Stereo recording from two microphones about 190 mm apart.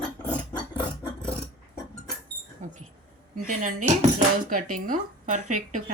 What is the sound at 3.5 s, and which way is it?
Speech, 45° right (ahead or behind).